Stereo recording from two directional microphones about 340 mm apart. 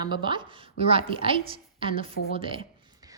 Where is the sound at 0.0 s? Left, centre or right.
Centre.